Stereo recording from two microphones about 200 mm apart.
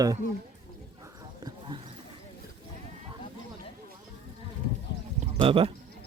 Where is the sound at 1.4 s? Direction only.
25° right (ahead or behind).